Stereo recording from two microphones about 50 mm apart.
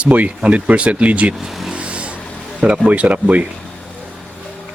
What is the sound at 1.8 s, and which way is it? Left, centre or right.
Vehicle, right.